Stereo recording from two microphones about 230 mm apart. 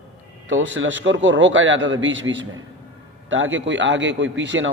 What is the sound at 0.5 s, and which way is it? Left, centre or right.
A man's voice, right.